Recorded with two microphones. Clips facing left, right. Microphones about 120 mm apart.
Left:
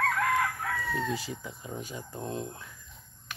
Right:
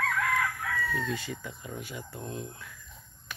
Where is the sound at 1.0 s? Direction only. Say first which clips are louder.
Left 1 dB; 15° left (ahead or behind).